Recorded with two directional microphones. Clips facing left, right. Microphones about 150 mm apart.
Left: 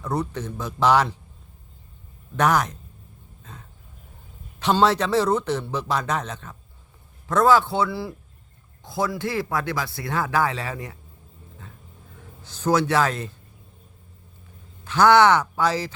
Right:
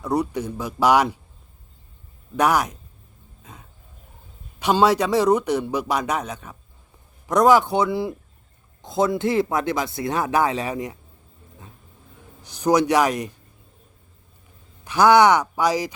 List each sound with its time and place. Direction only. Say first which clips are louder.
0.0 s a man's voice: right 4 dB; 10° right (ahead or behind)
2.3 s a man's voice: right 1 dB; 10° right (ahead or behind)
3.4 s a sound: even; 10° right (ahead or behind)
4.6 s a man's voice: right 2 dB; 10° right (ahead or behind)
12.4 s a man's voice: right 3 dB; 15° right (ahead or behind)
14.8 s a man's voice: right 1 dB; 10° right (ahead or behind)